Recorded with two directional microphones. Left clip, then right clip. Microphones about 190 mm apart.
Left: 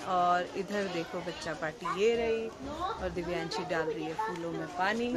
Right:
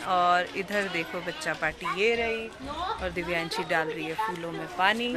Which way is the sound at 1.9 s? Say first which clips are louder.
Right 2 dB; 10° right (ahead or behind).